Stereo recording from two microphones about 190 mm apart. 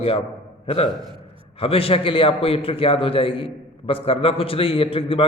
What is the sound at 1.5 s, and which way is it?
A man's voice, 30° left (ahead or behind).